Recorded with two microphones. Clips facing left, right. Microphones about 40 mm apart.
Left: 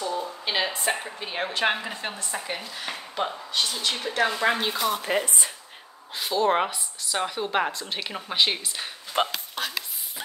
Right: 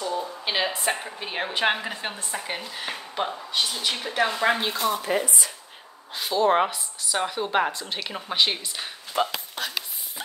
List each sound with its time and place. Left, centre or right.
0.0 s a sound: centre
1.2 s a woman's voice: centre
4.9 s speech: left
6.1 s speech: centre
9.1 s speech: left